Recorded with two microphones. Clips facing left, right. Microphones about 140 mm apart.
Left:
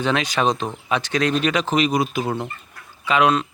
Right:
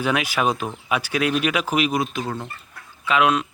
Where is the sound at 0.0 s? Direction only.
10° right (ahead or behind).